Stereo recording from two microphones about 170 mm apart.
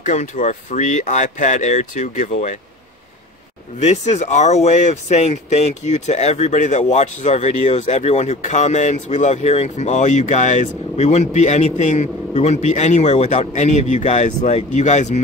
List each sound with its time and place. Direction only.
0.0 s speech: 45° left (ahead or behind)
3.8 s speech: 40° left (ahead or behind)